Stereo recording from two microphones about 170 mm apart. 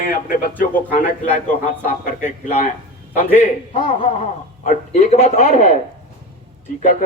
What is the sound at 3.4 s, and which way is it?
A man's voice, 50° left (ahead or behind).